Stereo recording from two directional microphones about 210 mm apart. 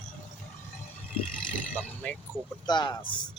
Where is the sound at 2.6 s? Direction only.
20° left (ahead or behind).